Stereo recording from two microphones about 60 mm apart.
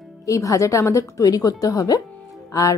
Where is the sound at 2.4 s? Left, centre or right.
Left.